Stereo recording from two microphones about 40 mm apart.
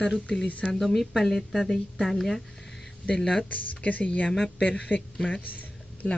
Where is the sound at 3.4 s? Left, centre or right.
Left.